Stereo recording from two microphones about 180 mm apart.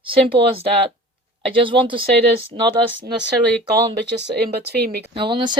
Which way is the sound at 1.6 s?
30° right (ahead or behind).